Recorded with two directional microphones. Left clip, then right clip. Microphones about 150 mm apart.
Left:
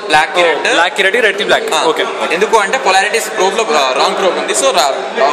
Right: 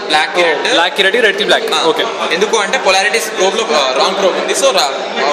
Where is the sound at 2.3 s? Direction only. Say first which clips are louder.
Left 3 dB; 50° left (ahead or behind).